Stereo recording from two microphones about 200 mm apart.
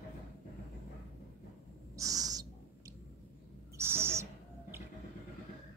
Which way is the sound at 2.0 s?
15° right (ahead or behind).